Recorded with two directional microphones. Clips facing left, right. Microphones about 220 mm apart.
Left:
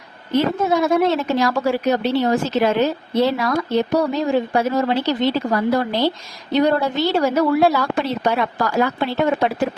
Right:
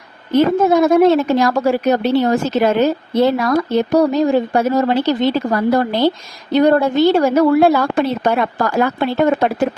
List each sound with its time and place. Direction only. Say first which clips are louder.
0.3 s a woman's voice: right 6 dB; 50° right (ahead or behind)